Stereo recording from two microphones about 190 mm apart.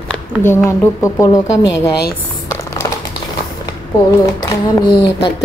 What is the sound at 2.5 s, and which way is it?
Typing, 15° left (ahead or behind).